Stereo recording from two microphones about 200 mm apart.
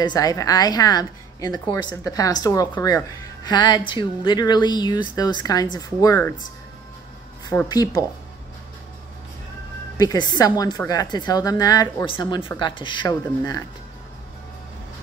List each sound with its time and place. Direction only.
0.0 s speech: 20° left (ahead or behind)
7.4 s speech: 20° left (ahead or behind)
9.9 s speech: 20° left (ahead or behind)